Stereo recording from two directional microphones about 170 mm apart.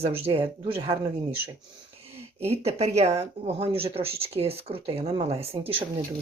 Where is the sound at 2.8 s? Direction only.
40° right (ahead or behind).